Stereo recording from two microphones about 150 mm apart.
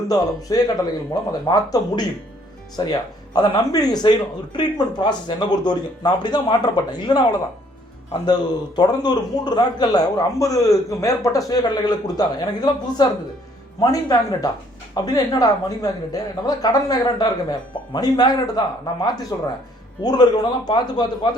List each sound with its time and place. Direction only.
0.4 s a man's voice: 25° left (ahead or behind)